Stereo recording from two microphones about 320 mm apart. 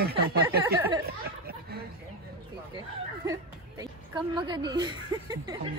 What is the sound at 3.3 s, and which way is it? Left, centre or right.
A woman's voice, centre.